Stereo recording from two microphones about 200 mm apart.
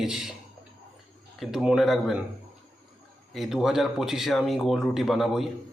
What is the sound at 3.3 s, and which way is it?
Speech, centre (ahead or behind).